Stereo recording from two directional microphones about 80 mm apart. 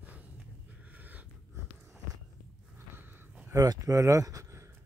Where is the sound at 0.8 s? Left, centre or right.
Right.